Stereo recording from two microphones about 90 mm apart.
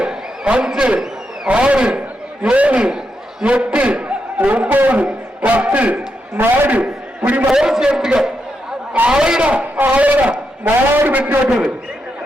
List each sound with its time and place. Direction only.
0.0 s a man's voice: 10° right (ahead or behind)
11.4 s a man's voice: 10° right (ahead or behind)